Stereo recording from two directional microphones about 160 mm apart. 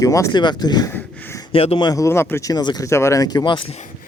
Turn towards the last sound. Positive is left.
turn(degrees=25)  # may be behind; listen again after turning